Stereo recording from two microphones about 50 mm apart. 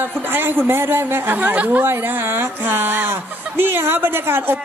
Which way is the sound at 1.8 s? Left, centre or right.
Right.